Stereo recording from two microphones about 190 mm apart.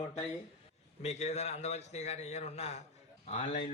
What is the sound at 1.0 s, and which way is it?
A man's voice, 35° left (ahead or behind).